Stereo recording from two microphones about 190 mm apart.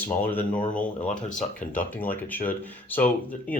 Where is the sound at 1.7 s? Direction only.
10° left (ahead or behind).